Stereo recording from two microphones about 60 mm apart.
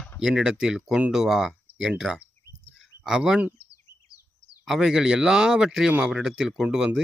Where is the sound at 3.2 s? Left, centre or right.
Centre.